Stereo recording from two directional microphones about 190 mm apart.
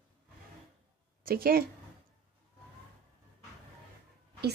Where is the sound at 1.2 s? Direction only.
50° right (ahead or behind).